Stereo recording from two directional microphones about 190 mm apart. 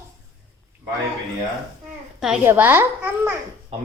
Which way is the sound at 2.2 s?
10° right (ahead or behind).